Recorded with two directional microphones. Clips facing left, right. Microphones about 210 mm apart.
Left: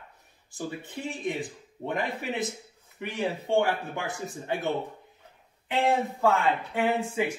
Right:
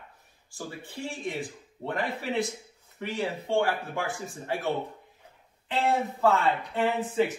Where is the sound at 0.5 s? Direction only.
20° left (ahead or behind).